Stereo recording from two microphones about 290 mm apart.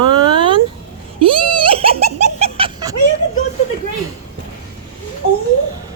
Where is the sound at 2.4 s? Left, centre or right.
Centre.